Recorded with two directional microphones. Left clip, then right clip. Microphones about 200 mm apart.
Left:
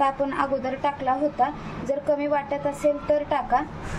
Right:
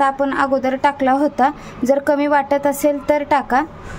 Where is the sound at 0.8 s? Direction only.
55° right (ahead or behind).